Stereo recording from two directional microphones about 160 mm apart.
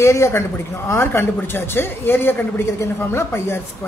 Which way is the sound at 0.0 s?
15° left (ahead or behind).